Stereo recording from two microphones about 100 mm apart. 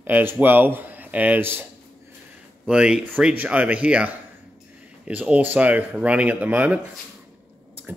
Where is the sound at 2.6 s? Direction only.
10° right (ahead or behind).